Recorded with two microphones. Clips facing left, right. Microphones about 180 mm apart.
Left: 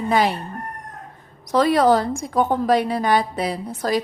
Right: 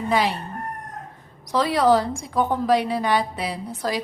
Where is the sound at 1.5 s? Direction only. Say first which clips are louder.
Left 2 dB; 50° left (ahead or behind).